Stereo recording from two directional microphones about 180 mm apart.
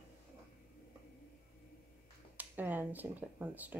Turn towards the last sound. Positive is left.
turn(degrees=-10)  # may be behind; listen again after turning